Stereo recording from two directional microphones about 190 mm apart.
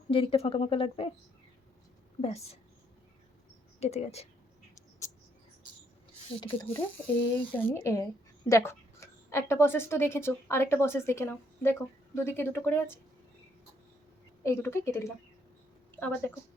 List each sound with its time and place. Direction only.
0.1 s a woman's voice: 30° left (ahead or behind)
2.2 s speech: 35° left (ahead or behind)
3.8 s speech: 35° left (ahead or behind)
6.3 s a woman's voice: 25° left (ahead or behind)
7.3 s speech: 10° left (ahead or behind)
14.4 s speech: 15° left (ahead or behind)